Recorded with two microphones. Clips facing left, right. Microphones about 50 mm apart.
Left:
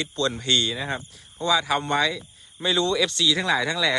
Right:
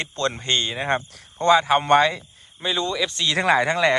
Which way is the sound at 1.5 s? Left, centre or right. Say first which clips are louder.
Right 5 dB; right.